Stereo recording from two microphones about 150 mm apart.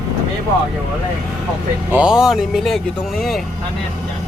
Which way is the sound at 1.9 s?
5° right (ahead or behind).